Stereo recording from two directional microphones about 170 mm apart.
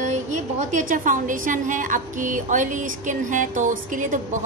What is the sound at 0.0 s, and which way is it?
A woman's voice, 45° right (ahead or behind).